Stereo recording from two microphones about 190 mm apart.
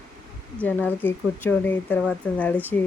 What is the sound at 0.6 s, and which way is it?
A woman's voice, 10° left (ahead or behind).